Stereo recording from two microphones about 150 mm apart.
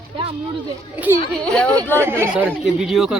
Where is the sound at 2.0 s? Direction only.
15° right (ahead or behind).